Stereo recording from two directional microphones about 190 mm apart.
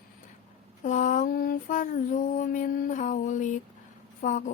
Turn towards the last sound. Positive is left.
turn(degrees=45)  # may be behind; listen again after turning